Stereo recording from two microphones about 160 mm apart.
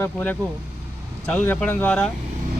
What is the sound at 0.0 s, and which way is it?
Speech, 10° left (ahead or behind).